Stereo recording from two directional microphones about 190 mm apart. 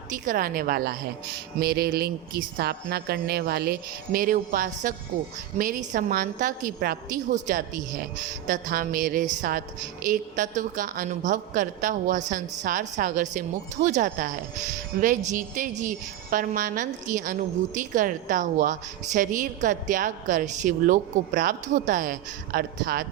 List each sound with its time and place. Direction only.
0.1 s a woman's voice: 45° right (ahead or behind)